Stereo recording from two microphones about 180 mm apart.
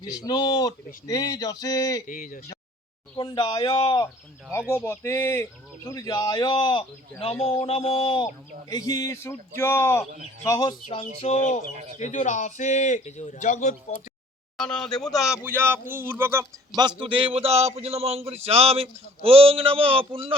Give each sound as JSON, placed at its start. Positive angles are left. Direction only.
{"t": 0.1, "sound": "speech", "side_deg": 20}
{"t": 2.0, "sound": "speech", "side_deg": 50}
{"t": 3.2, "sound": "speech", "side_deg": 25}
{"t": 4.7, "sound": "a man's voice", "side_deg": 15}
{"t": 11.2, "sound": "a man's voice", "side_deg": 40}
{"t": 11.6, "sound": "speech", "side_deg": -40}
{"t": 11.9, "sound": "a man's voice", "side_deg": 40}
{"t": 14.6, "sound": "a man's voice", "side_deg": 5}